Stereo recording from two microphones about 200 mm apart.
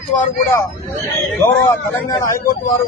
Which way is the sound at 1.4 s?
15° left (ahead or behind).